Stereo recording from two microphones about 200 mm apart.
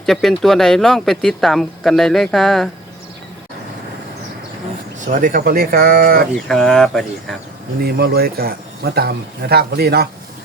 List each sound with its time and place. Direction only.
0.0 s speech: centre (ahead or behind)
4.9 s a man's voice: 40° right (ahead or behind)
6.5 s speech: centre (ahead or behind)
7.8 s a man's voice: 50° right (ahead or behind)